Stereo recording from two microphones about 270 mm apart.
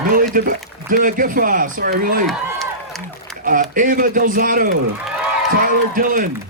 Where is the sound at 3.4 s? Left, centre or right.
Right.